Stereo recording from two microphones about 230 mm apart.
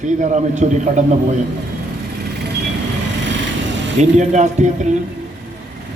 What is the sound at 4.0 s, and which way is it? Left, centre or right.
A man's voice, right.